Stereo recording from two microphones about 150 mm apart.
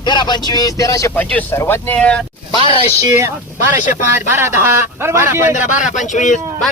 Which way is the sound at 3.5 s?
60° left (ahead or behind).